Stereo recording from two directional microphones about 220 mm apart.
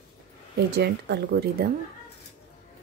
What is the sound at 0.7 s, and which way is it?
Speech, 50° right (ahead or behind).